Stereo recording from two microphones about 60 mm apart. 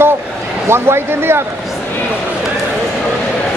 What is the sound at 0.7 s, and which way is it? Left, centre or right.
Speech, right.